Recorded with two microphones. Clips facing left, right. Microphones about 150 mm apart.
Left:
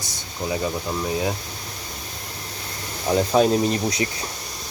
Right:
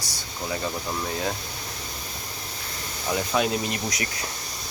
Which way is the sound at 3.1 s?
35° left (ahead or behind).